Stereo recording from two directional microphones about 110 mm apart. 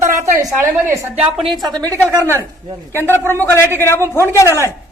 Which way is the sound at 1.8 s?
30° right (ahead or behind).